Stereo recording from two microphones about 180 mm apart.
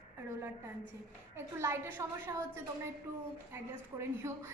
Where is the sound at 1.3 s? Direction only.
15° right (ahead or behind).